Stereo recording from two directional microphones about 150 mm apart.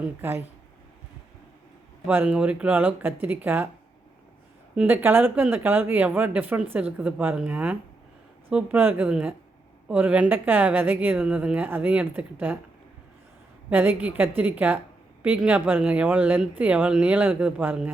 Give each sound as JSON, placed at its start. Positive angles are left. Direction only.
{"t": 0.2, "sound": "speech", "side_deg": -15}
{"t": 2.0, "sound": "speech", "side_deg": -10}
{"t": 4.7, "sound": "speech", "side_deg": -10}
{"t": 13.7, "sound": "speech", "side_deg": -10}